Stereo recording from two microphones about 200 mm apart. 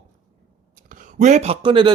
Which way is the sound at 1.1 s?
35° right (ahead or behind).